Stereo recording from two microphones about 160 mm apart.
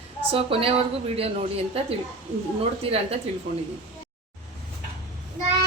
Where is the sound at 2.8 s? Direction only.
40° right (ahead or behind).